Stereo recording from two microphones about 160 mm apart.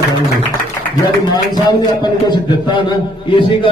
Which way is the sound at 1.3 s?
25° left (ahead or behind).